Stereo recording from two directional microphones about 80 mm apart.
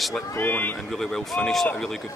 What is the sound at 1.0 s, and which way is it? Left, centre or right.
Speech, centre.